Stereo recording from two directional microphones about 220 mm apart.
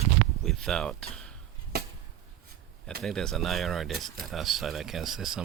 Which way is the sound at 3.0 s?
Centre (ahead or behind).